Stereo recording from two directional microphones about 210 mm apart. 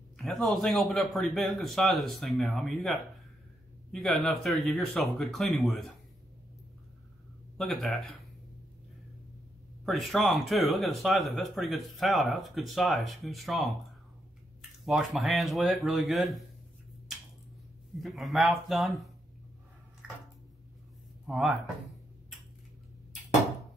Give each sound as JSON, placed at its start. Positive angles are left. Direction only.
{"t": 0.2, "sound": "speech", "side_deg": 0}
{"t": 7.5, "sound": "speech", "side_deg": 0}
{"t": 9.8, "sound": "speech", "side_deg": 0}
{"t": 14.9, "sound": "speech", "side_deg": 0}
{"t": 17.9, "sound": "speech", "side_deg": 0}
{"t": 20.0, "sound": "a sound", "side_deg": -5}
{"t": 21.3, "sound": "speech", "side_deg": 0}